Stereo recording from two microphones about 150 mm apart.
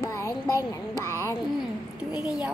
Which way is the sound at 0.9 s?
20° left (ahead or behind).